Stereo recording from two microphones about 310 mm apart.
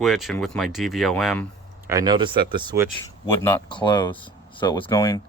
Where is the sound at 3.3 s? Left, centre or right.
Centre.